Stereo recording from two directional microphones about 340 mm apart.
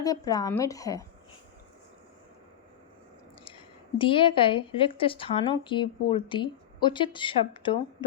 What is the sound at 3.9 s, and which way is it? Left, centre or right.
A woman's voice, centre.